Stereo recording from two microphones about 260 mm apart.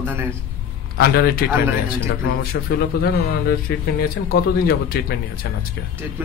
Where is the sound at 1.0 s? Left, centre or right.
Left.